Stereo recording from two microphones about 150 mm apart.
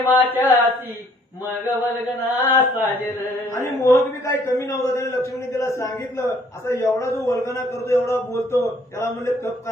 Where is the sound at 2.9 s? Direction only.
15° left (ahead or behind).